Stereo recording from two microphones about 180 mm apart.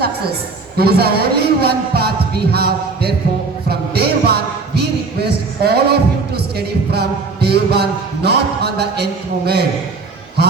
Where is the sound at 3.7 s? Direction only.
60° right (ahead or behind).